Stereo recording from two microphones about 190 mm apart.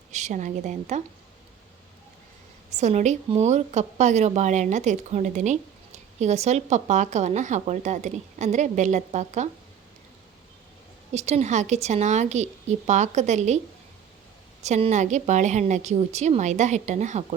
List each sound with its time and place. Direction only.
0.1 s speech: 40° right (ahead or behind)
2.7 s speech: 35° right (ahead or behind)
11.1 s speech: 35° right (ahead or behind)
14.6 s speech: 35° right (ahead or behind)